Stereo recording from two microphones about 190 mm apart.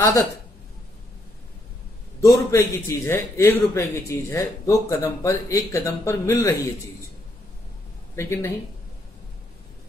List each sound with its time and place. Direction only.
2.2 s a man's voice: 15° left (ahead or behind)
8.2 s a man's voice: 15° left (ahead or behind)